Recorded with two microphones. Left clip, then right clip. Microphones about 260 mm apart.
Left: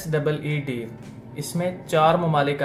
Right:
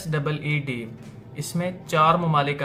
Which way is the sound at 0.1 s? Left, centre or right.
Centre.